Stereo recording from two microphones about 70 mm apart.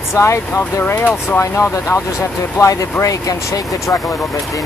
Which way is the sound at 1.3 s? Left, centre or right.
Left.